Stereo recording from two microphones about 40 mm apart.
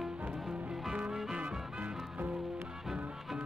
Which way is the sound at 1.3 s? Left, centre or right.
Right.